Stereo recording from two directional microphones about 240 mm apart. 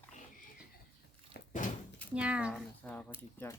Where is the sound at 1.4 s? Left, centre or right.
Left.